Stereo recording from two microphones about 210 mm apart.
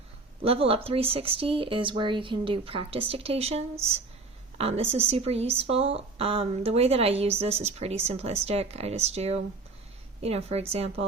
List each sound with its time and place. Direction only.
0.4 s a woman's voice: 25° right (ahead or behind)